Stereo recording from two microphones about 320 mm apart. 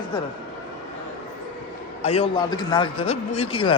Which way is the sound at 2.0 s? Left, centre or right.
Centre.